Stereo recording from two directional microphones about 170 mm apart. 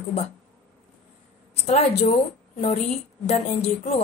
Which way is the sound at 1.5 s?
40° left (ahead or behind).